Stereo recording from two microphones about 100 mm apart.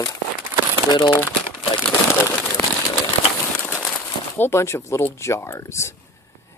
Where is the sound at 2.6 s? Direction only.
15° left (ahead or behind).